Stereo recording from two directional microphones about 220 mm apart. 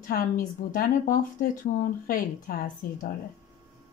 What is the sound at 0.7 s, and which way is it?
Speech, 35° left (ahead or behind).